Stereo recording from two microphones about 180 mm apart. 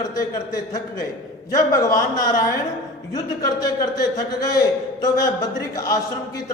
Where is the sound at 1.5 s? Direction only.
15° left (ahead or behind).